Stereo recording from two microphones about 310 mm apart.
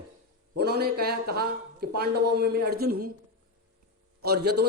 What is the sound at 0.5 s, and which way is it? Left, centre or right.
Speech, right.